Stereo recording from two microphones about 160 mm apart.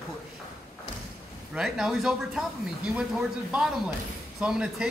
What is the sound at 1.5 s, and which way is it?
Speech, 5° right (ahead or behind).